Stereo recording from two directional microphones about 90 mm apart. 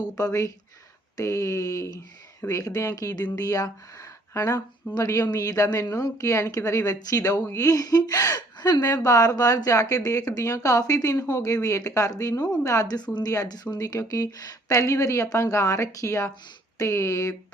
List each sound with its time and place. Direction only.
0.0 s speech: 40° left (ahead or behind)